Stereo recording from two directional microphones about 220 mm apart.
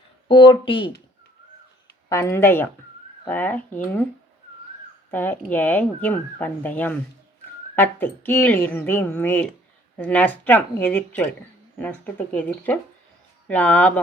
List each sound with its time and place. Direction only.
0.3 s speech: 20° left (ahead or behind)
2.0 s speech: 15° left (ahead or behind)
5.1 s speech: 10° left (ahead or behind)